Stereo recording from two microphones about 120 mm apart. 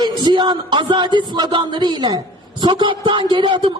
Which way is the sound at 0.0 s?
40° right (ahead or behind).